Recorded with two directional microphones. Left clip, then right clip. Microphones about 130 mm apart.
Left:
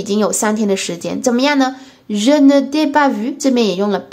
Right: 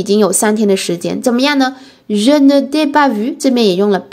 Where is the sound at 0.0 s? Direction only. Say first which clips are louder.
Right 4 dB; 30° right (ahead or behind).